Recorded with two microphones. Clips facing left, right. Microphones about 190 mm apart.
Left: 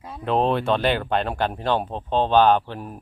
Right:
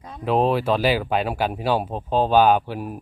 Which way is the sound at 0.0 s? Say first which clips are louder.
Right 2 dB; centre (ahead or behind).